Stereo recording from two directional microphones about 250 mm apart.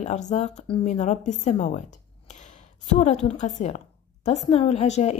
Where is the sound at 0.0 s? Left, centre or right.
Left.